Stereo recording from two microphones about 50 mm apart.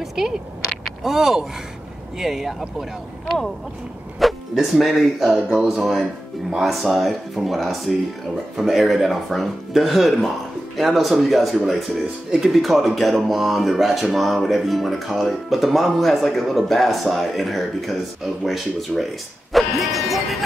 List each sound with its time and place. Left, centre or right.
0.0 s a sound: centre
1.0 s speech: centre
4.2 s speech: centre
19.5 s music: centre